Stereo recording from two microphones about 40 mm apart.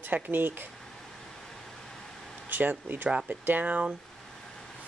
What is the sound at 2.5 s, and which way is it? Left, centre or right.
Speech, right.